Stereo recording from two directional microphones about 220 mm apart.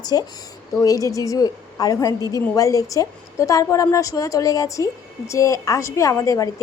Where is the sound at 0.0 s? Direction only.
15° left (ahead or behind).